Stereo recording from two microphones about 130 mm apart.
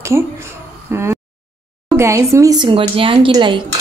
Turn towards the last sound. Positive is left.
turn(degrees=-40)  # may be behind; listen again after turning